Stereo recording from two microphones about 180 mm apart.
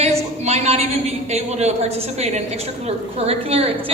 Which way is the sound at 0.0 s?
35° right (ahead or behind).